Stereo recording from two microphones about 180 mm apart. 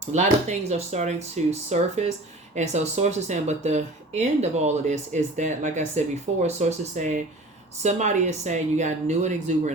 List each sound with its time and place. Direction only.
0.1 s speech: 40° right (ahead or behind)